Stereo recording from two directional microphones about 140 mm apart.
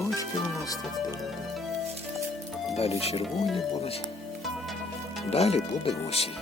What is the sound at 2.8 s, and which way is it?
Speech, 45° left (ahead or behind).